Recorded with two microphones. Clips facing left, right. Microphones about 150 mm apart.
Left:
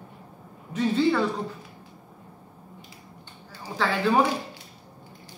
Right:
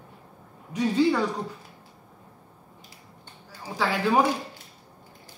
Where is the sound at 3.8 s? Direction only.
10° right (ahead or behind).